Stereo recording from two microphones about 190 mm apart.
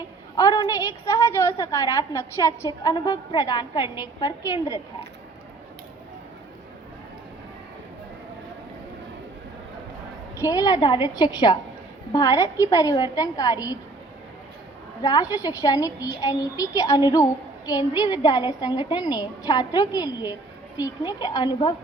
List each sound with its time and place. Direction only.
0.3 s a woman's voice: 20° left (ahead or behind)
10.4 s a woman's voice: 20° left (ahead or behind)
15.0 s a woman's voice: 20° left (ahead or behind)